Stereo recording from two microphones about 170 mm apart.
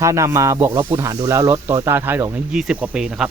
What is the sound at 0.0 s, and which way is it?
Speech, 15° right (ahead or behind).